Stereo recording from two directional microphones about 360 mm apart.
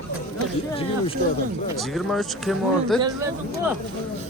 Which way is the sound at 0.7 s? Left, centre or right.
Centre.